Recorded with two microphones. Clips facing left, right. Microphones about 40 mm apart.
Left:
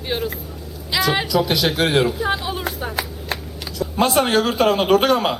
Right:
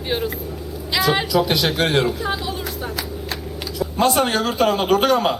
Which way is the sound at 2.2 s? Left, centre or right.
Centre.